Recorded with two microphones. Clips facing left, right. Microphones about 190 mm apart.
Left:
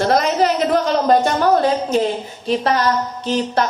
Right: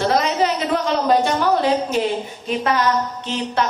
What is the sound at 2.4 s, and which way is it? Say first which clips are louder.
A woman's voice: left 2 dB; 35° left (ahead or behind).